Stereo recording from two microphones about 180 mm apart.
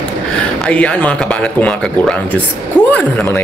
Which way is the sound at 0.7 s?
5° left (ahead or behind).